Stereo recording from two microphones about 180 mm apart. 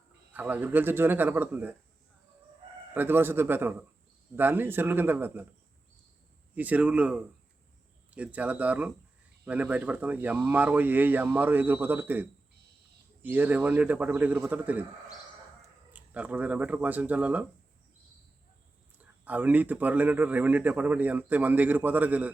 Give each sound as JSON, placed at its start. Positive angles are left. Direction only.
{"t": 0.3, "sound": "a man's voice", "side_deg": -10}
{"t": 2.9, "sound": "a man's voice", "side_deg": -10}
{"t": 6.5, "sound": "a man's voice", "side_deg": -10}
{"t": 15.9, "sound": "a man's voice", "side_deg": -10}
{"t": 18.9, "sound": "a man's voice", "side_deg": -10}